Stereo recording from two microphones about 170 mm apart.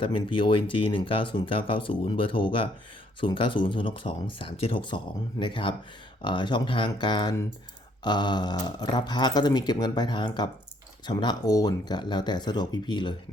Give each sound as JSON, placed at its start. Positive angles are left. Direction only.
{"t": 0.0, "sound": "speech", "side_deg": 30}